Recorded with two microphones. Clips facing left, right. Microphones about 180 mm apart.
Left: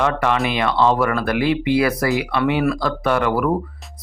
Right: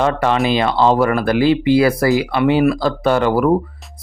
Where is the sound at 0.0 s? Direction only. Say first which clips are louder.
Right 3 dB; 30° right (ahead or behind).